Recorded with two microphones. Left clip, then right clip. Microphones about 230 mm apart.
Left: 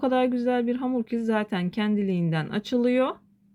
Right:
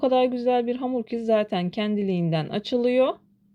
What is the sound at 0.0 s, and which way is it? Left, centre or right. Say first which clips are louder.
Speech: right 3 dB; left.